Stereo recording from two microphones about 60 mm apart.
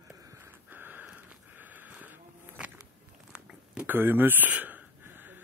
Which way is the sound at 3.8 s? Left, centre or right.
Right.